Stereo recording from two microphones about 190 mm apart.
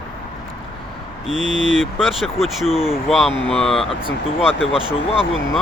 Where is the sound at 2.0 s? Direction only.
Centre (ahead or behind).